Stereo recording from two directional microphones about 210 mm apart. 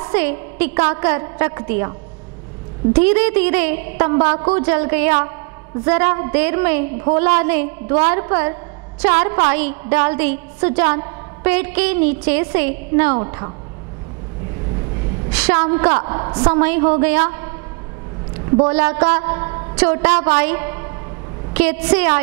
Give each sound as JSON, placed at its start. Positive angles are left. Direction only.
{"t": 0.1, "sound": "a woman's voice", "side_deg": -10}
{"t": 15.3, "sound": "a woman's voice", "side_deg": -10}
{"t": 16.0, "sound": "a woman's voice", "side_deg": -25}
{"t": 16.5, "sound": "a woman's voice", "side_deg": -10}
{"t": 18.7, "sound": "a woman's voice", "side_deg": -10}